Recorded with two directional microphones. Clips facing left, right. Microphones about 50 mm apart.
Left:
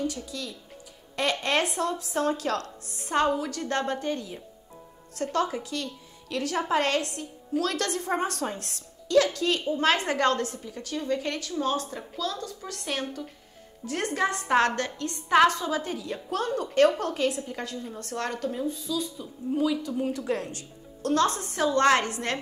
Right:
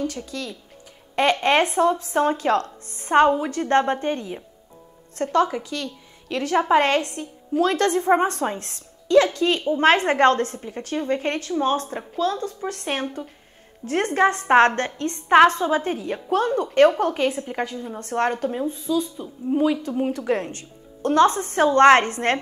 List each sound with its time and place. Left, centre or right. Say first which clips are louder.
1.1 s a woman's voice: right 7 dB; right
17.4 s a woman's voice: right 6 dB; right
21.5 s a woman's voice: right 8 dB; right